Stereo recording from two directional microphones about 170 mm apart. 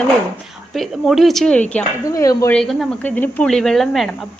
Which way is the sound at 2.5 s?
Centre (ahead or behind).